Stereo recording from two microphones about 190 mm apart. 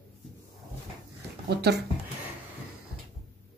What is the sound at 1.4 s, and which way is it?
Speech, 60° right (ahead or behind).